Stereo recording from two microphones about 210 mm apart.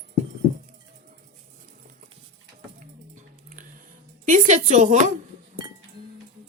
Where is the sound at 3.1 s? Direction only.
40° right (ahead or behind).